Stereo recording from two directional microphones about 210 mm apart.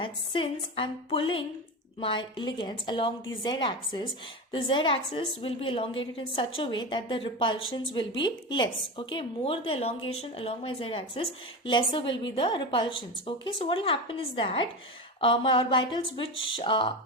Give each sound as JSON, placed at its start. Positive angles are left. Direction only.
{"t": 0.0, "sound": "a woman's voice", "side_deg": 25}